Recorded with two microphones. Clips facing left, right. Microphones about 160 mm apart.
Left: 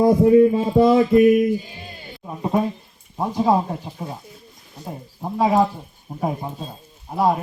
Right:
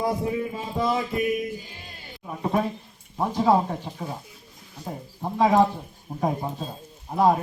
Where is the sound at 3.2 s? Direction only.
15° left (ahead or behind).